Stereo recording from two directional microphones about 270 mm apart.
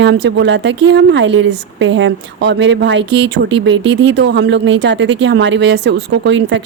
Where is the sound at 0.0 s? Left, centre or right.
Right.